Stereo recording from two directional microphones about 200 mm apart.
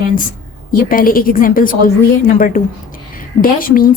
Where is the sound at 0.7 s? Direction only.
45° left (ahead or behind).